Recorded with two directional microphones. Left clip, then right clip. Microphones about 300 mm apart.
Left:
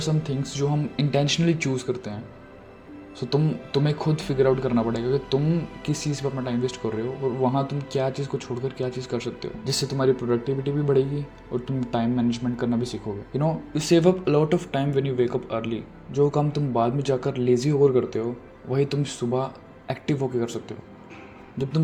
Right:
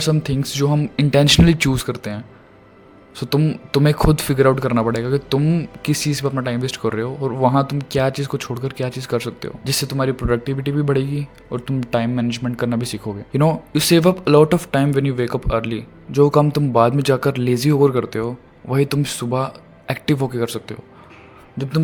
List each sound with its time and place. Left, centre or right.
0.0 s speech: right